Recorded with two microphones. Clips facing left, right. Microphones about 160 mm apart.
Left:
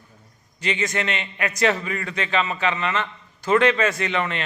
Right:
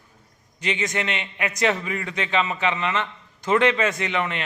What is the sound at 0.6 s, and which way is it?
A man's voice, 15° right (ahead or behind).